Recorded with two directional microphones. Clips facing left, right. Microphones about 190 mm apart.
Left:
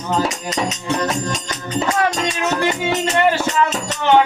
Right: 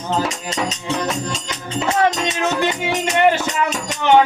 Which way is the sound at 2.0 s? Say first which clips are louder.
Right 1 dB; 20° right (ahead or behind).